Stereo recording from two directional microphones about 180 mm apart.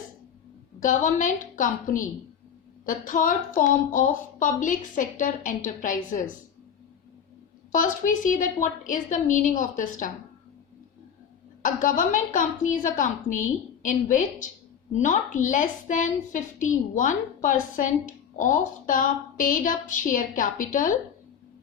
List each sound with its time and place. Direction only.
0.8 s a woman's voice: 45° left (ahead or behind)
7.7 s a woman's voice: 45° left (ahead or behind)
11.6 s a woman's voice: 45° left (ahead or behind)